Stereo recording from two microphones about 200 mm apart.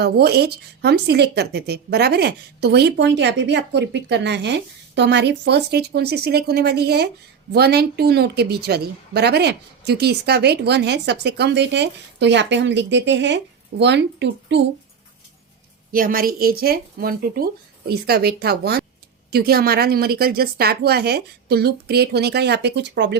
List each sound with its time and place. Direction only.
0.0 s a woman's voice: 55° right (ahead or behind)
15.9 s a woman's voice: 45° right (ahead or behind); by 23.1 s 60° right (ahead or behind)